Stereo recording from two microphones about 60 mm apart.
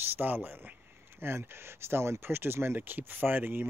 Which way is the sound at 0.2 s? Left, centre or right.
Right.